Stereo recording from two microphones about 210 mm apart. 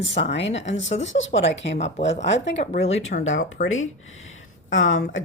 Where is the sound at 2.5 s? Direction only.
30° left (ahead or behind).